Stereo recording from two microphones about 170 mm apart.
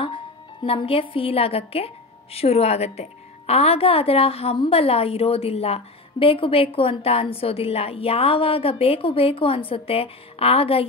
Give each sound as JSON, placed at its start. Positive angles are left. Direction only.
{"t": 0.7, "sound": "a woman's voice", "side_deg": 35}